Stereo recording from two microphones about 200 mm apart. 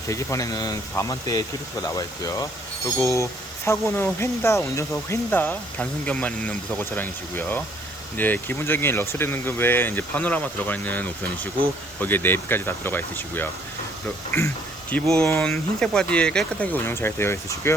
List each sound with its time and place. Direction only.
0.1 s speech: 15° left (ahead or behind)